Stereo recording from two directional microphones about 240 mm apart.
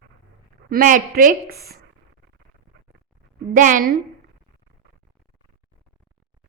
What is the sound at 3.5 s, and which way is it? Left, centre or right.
Speech, right.